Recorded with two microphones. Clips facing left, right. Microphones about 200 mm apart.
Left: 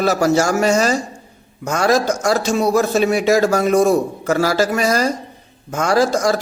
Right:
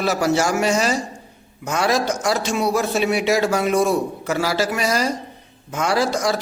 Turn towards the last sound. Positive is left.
turn(degrees=45)  # may be behind; listen again after turning